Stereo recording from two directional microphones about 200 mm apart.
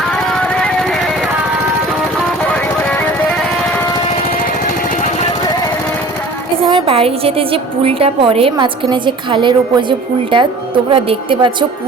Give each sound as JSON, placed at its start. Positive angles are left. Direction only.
{"t": 0.3, "sound": "music", "side_deg": 5}
{"t": 6.7, "sound": "a woman's voice", "side_deg": -25}